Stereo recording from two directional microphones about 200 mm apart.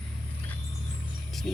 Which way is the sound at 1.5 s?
Centre (ahead or behind).